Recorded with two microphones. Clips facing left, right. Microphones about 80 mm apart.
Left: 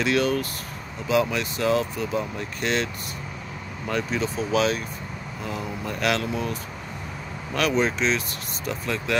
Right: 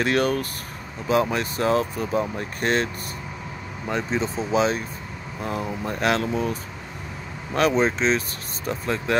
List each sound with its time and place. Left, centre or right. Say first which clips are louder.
0.0 s speech: right 1 dB; right
3.8 s speech: right 1 dB; right